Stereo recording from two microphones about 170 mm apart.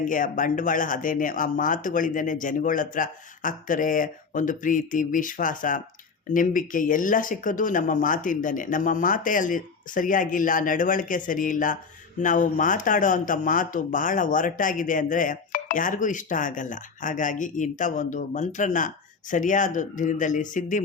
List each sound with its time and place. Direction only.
0.0 s speech: 50° left (ahead or behind)